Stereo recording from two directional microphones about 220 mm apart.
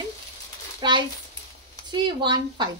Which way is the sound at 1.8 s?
20° right (ahead or behind).